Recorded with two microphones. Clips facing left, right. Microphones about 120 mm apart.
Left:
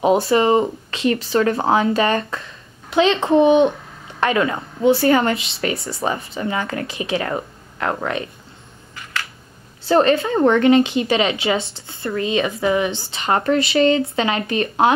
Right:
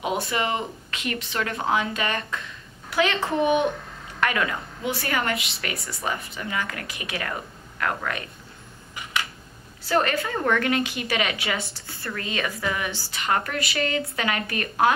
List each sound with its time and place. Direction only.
0.0 s speech: 30° left (ahead or behind)
2.9 s a woman's voice: 25° left (ahead or behind)
9.8 s a woman's voice: 30° left (ahead or behind)